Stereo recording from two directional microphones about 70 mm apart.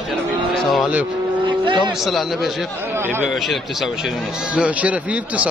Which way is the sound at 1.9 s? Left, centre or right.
Centre.